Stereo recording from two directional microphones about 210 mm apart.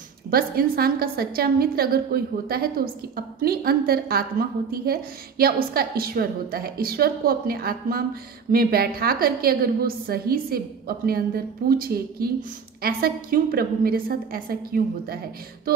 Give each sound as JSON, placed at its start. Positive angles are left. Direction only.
{"t": 0.3, "sound": "a woman's voice", "side_deg": -45}